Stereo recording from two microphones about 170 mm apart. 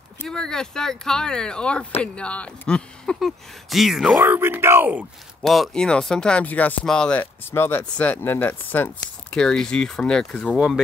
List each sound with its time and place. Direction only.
0.2 s speech: 5° left (ahead or behind)
4.2 s speech: 15° right (ahead or behind)
5.4 s speech: centre (ahead or behind)